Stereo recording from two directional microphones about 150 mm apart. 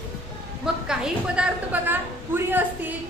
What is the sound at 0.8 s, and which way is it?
A woman's voice, 5° right (ahead or behind).